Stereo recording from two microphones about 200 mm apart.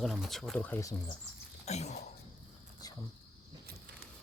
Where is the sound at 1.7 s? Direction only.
35° left (ahead or behind).